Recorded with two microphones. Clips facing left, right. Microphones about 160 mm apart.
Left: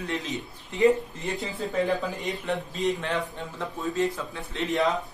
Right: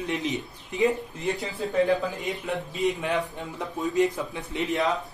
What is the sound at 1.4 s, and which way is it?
A man's voice, centre (ahead or behind).